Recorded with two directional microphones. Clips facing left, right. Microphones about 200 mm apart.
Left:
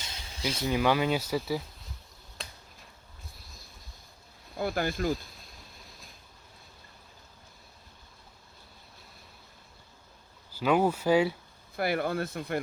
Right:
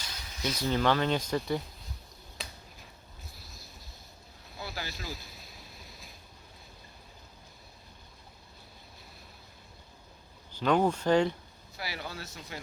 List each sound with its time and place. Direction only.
0.0 s a sound: 25° left (ahead or behind)
0.7 s speech: 10° left (ahead or behind)
2.4 s finger snapping: centre (ahead or behind)
4.5 s speech: 55° left (ahead or behind)
5.1 s a sound: 5° right (ahead or behind)
10.5 s speech: 5° left (ahead or behind)
11.8 s speech: 55° left (ahead or behind)